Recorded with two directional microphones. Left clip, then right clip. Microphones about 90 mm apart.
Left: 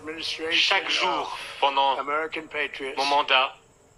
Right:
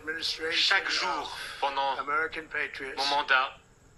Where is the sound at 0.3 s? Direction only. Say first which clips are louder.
Left 4 dB; 25° left (ahead or behind).